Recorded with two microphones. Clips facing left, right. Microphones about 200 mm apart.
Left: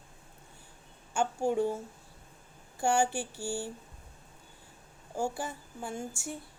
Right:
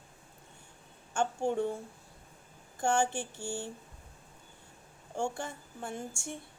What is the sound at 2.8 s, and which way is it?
Speech, 10° left (ahead or behind).